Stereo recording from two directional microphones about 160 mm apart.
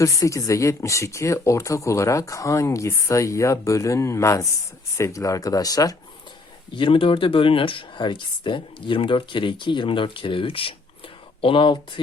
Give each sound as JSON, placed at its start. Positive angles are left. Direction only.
{"t": 0.0, "sound": "speech", "side_deg": 20}
{"t": 6.7, "sound": "speech", "side_deg": 35}